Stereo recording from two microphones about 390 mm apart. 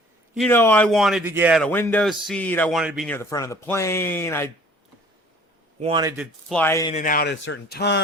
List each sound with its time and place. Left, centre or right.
0.3 s speech: centre
5.8 s speech: centre; by 8.0 s left